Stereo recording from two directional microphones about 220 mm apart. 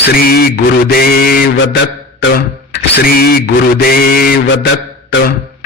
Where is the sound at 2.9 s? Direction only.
45° left (ahead or behind).